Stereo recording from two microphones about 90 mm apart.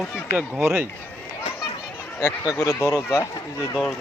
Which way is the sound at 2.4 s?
40° left (ahead or behind).